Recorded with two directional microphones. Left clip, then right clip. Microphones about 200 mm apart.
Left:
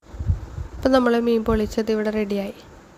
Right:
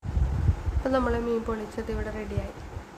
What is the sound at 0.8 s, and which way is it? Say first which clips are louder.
A woman's voice: left 8 dB; 45° left (ahead or behind).